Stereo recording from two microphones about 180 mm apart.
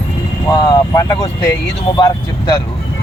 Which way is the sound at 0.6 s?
20° left (ahead or behind).